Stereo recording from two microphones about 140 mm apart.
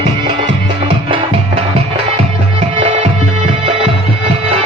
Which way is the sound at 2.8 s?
40° right (ahead or behind).